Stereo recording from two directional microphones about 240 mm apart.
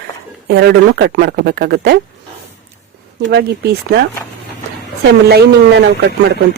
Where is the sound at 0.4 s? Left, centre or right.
Right.